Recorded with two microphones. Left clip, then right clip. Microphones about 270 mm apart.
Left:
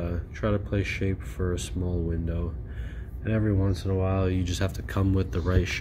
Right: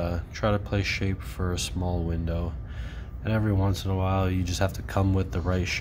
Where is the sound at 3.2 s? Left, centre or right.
Centre.